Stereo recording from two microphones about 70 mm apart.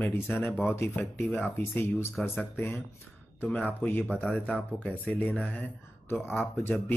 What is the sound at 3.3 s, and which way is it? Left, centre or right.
Speech, left.